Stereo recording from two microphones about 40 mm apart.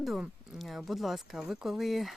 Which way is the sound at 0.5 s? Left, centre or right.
Centre.